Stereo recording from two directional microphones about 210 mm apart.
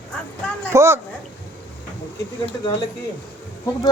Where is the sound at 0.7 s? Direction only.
10° right (ahead or behind).